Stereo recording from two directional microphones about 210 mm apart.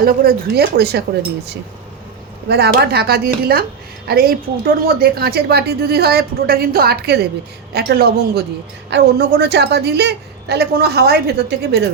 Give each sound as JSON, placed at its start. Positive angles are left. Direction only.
{"t": 0.0, "sound": "a woman's voice", "side_deg": -45}
{"t": 2.5, "sound": "a woman's voice", "side_deg": -50}